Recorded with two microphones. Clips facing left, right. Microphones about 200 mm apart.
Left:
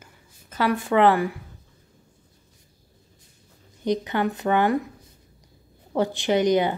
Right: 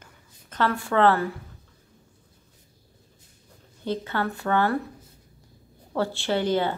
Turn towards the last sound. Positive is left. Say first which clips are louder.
# left 4 dB
turn(degrees=15)  # may be behind; listen again after turning